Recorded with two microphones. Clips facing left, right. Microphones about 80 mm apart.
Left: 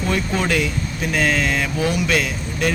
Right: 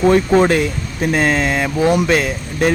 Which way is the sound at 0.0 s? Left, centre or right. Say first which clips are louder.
Right 10 dB; right.